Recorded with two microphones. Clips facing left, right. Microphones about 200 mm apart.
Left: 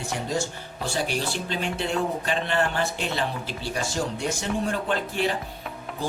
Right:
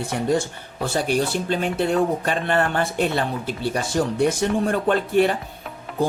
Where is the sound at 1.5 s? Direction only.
55° right (ahead or behind).